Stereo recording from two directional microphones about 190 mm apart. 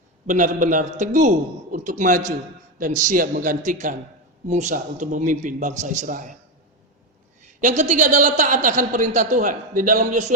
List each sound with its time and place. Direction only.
0.3 s a woman's voice: 40° right (ahead or behind)
7.4 s a woman's voice: 40° right (ahead or behind)